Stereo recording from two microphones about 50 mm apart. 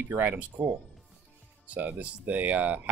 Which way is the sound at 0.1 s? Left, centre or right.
Right.